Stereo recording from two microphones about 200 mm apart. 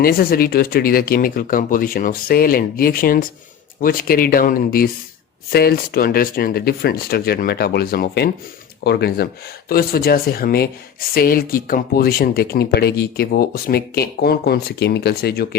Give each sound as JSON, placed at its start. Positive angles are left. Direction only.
{"t": 0.0, "sound": "speech", "side_deg": 50}